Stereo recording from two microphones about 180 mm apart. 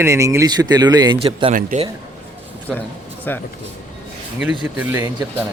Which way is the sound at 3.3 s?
10° left (ahead or behind).